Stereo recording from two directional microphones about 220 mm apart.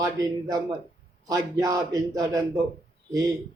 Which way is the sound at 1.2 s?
15° right (ahead or behind).